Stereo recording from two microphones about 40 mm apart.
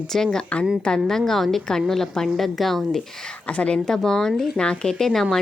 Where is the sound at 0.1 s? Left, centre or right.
Centre.